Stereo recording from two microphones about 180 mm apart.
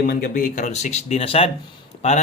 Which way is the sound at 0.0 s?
50° left (ahead or behind).